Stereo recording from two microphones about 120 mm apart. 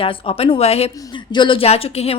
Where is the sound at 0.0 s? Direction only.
50° left (ahead or behind).